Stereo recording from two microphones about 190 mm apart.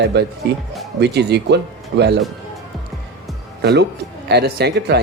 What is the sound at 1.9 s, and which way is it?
Speech, 70° right (ahead or behind).